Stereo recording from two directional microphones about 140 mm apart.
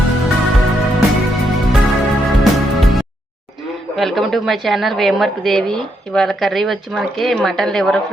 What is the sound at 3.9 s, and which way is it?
A woman's voice, centre (ahead or behind).